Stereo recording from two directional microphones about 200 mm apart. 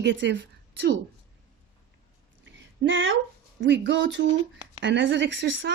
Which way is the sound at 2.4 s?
70° right (ahead or behind).